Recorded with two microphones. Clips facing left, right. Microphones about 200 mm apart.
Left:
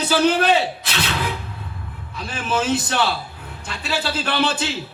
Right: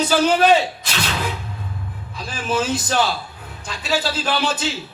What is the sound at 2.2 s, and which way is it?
A man's voice, 60° left (ahead or behind).